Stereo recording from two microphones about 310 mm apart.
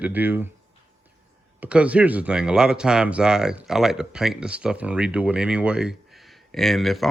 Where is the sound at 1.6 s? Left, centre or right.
Centre.